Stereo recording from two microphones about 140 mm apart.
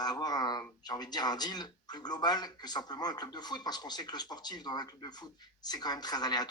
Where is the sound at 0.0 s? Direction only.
30° left (ahead or behind).